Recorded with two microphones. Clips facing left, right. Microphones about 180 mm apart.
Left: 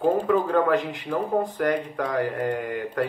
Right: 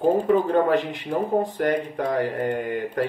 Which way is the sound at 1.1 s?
30° right (ahead or behind).